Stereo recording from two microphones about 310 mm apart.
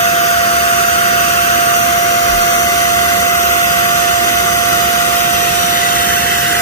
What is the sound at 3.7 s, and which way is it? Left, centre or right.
Vacuum cleaner, centre.